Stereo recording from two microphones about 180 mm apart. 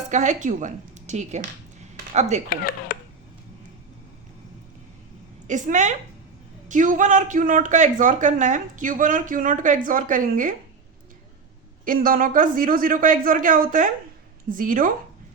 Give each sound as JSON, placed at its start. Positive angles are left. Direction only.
{"t": 0.1, "sound": "speech", "side_deg": -40}
{"t": 2.5, "sound": "speech", "side_deg": 55}
{"t": 5.5, "sound": "a man's voice", "side_deg": -45}
{"t": 11.9, "sound": "a man's voice", "side_deg": -50}